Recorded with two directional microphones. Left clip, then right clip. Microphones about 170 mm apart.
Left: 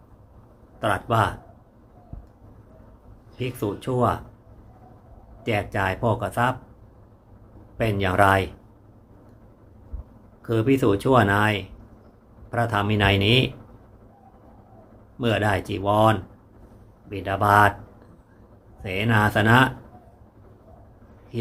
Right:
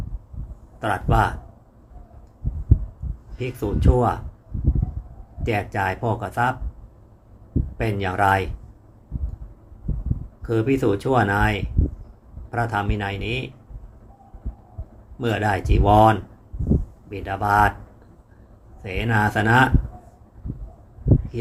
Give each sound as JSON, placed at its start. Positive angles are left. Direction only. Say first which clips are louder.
{"t": 0.8, "sound": "speech", "louder": "right 1 dB", "side_deg": 15}
{"t": 3.3, "sound": "speech", "louder": "right 1 dB", "side_deg": 15}
{"t": 5.4, "sound": "speech", "louder": "right 1 dB", "side_deg": 15}
{"t": 7.8, "sound": "speech", "louder": "left 2 dB", "side_deg": 15}
{"t": 10.4, "sound": "speech", "louder": "even", "side_deg": 15}
{"t": 15.2, "sound": "speech", "louder": "even", "side_deg": 15}
{"t": 18.8, "sound": "speech", "louder": "even", "side_deg": 15}